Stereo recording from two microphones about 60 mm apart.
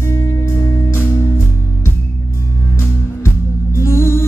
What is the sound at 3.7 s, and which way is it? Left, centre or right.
Music, left.